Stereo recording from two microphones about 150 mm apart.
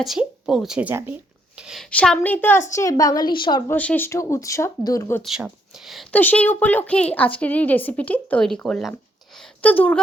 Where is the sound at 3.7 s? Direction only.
10° left (ahead or behind).